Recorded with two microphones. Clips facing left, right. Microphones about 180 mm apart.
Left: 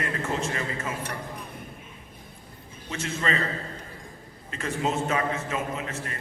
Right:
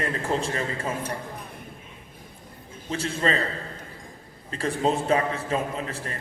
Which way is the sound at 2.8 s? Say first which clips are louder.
Right 3 dB; 35° right (ahead or behind).